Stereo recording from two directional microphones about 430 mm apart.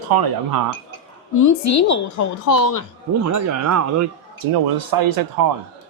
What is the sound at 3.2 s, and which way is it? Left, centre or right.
Speech, right.